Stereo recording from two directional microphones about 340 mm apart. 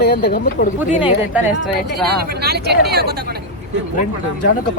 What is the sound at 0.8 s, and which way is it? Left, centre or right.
Speech, centre.